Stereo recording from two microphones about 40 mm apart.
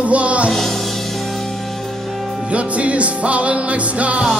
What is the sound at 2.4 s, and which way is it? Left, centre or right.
Music, right.